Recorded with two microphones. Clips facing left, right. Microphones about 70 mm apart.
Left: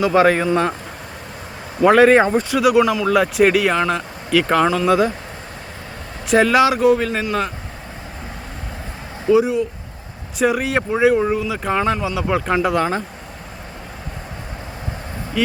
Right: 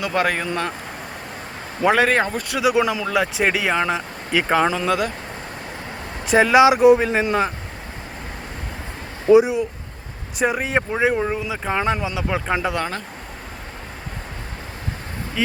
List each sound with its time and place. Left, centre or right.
0.0 s speech: centre
1.8 s speech: centre
2.6 s speech: centre
2.8 s speech: centre
4.9 s speech: centre
6.2 s speech: centre
9.3 s speech: centre
10.3 s speech: centre
11.3 s speech: centre